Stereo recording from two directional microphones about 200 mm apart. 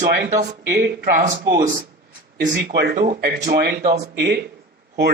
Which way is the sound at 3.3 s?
35° right (ahead or behind).